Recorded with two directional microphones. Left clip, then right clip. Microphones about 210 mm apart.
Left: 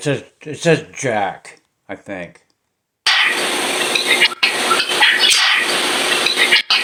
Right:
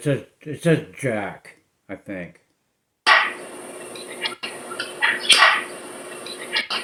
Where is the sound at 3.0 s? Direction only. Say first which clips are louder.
Left 3 dB; 25° left (ahead or behind).